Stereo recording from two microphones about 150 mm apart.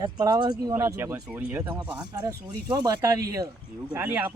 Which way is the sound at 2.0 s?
20° right (ahead or behind).